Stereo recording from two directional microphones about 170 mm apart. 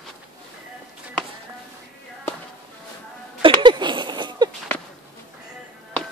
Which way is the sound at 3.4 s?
25° right (ahead or behind).